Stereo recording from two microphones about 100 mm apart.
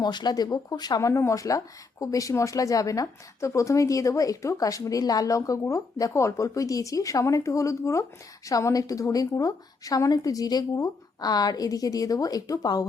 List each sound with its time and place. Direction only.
0.0 s speech: 45° left (ahead or behind)